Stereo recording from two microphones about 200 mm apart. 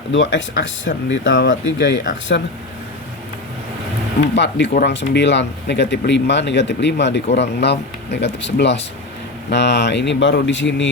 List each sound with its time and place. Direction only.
0.1 s speech: 65° left (ahead or behind)
4.4 s speech: 60° left (ahead or behind)